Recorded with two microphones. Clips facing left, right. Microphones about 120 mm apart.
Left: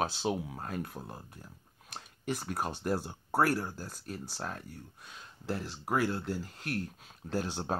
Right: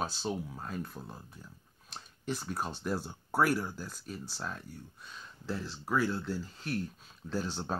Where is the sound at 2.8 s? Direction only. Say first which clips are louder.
Left 2 dB; 50° left (ahead or behind).